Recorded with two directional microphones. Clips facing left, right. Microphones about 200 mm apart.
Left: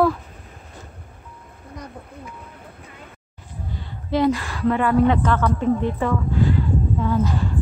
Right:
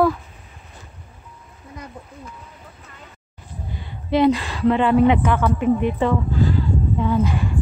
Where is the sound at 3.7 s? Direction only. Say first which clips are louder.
Right 3 dB; 20° right (ahead or behind).